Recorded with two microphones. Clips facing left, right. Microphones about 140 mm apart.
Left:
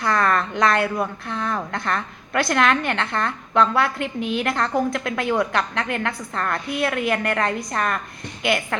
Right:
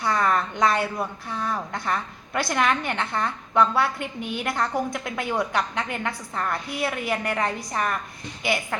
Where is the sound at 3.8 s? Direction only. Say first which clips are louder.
Left 3 dB; 90° left.